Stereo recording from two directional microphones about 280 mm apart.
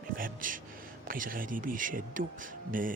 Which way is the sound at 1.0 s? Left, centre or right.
Right.